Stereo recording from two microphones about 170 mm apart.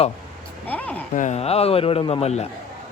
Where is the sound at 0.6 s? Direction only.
10° left (ahead or behind).